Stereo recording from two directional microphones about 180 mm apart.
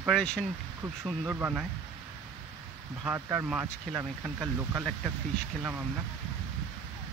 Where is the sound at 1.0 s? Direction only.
10° right (ahead or behind).